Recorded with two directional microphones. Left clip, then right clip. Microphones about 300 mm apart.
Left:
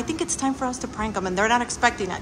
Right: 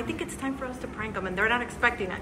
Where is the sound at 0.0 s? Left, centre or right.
Centre.